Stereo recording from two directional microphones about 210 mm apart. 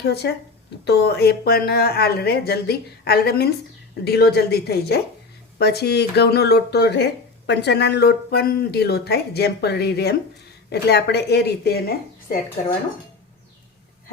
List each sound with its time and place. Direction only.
0.0 s speech: 50° left (ahead or behind)